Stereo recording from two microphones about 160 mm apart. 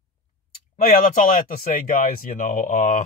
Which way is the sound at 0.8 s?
65° left (ahead or behind).